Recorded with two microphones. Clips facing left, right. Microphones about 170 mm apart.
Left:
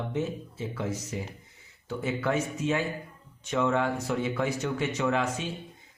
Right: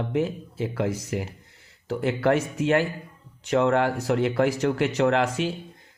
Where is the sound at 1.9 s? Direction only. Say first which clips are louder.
Right 7 dB; 80° right.